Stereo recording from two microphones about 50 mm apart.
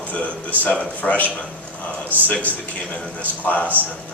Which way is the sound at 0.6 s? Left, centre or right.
Left.